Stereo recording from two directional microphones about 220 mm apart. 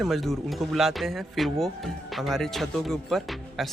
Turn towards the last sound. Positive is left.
turn(degrees=0)  # may be behind; listen again after turning